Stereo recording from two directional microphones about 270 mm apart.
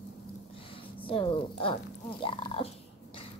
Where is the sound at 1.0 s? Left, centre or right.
Centre.